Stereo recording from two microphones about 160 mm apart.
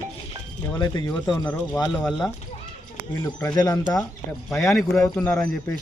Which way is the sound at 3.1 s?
20° left (ahead or behind).